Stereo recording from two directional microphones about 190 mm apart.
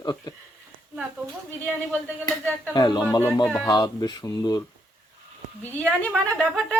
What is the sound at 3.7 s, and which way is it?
Speech, 20° left (ahead or behind).